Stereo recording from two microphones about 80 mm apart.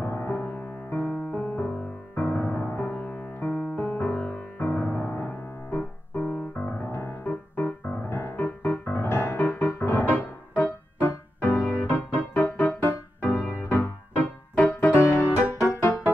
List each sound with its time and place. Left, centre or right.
0.0 s music: left
6.9 s music: left
7.2 s music: left
15.0 s music: left